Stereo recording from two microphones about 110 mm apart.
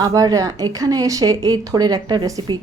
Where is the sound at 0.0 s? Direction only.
35° right (ahead or behind).